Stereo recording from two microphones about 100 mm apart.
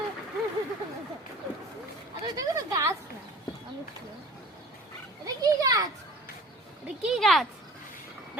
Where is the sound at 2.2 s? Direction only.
40° right (ahead or behind).